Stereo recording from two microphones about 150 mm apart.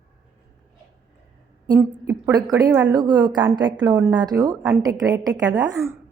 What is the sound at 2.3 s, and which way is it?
A woman's voice, 25° right (ahead or behind).